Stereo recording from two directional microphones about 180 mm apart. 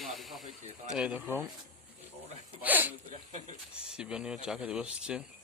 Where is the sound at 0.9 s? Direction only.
5° right (ahead or behind).